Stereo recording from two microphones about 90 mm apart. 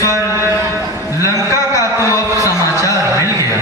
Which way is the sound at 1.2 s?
35° left (ahead or behind).